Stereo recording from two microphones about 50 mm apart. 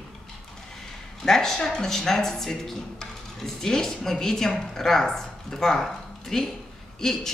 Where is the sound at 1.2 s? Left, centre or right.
Centre.